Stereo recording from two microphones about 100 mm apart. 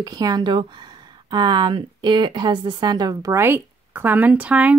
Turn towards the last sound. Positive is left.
turn(degrees=-15)  # may be behind; listen again after turning